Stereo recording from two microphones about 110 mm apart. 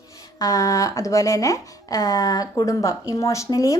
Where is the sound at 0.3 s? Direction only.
30° left (ahead or behind).